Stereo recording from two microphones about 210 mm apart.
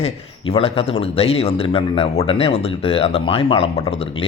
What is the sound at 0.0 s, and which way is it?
A man's voice, 30° left (ahead or behind).